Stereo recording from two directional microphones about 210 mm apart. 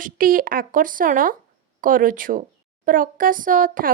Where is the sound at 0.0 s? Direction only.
40° right (ahead or behind).